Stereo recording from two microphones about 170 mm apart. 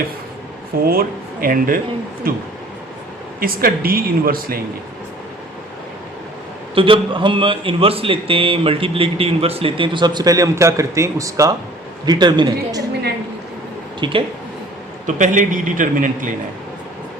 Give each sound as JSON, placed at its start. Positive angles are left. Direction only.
{"t": 0.9, "sound": "speech", "side_deg": -60}
{"t": 3.4, "sound": "speech", "side_deg": -60}
{"t": 6.7, "sound": "a man's voice", "side_deg": -30}
{"t": 14.0, "sound": "speech", "side_deg": -30}
{"t": 15.0, "sound": "a man's voice", "side_deg": -50}